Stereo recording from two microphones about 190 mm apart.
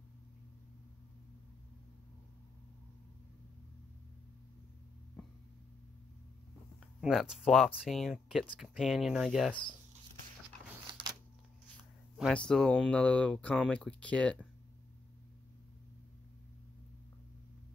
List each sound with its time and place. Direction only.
7.0 s speech: centre (ahead or behind)
10.9 s power windows: 25° right (ahead or behind)
12.2 s speech: 5° left (ahead or behind)